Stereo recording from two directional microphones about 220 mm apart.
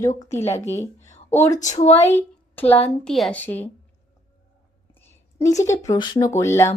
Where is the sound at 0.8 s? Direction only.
30° left (ahead or behind).